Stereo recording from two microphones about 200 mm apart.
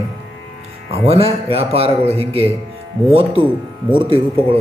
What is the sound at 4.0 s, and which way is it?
Speech, 25° right (ahead or behind).